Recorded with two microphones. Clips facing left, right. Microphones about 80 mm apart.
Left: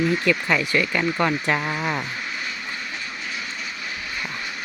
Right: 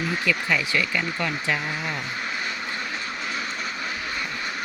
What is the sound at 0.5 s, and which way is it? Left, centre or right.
Speech, left.